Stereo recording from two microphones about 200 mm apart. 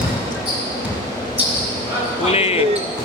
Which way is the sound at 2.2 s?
30° left (ahead or behind).